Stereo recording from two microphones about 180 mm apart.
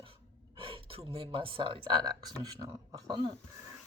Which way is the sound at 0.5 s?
30° right (ahead or behind).